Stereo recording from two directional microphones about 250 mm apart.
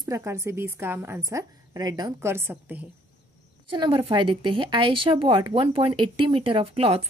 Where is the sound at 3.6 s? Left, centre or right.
Centre.